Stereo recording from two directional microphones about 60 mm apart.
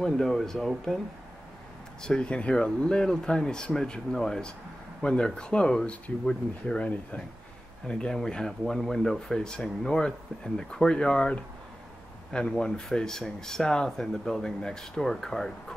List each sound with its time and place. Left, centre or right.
0.0 s speech: centre
2.0 s speech: centre